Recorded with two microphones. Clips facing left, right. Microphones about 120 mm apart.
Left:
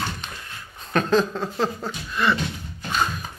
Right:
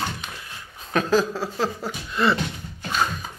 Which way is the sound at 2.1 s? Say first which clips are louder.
Right 1 dB; 30° right (ahead or behind).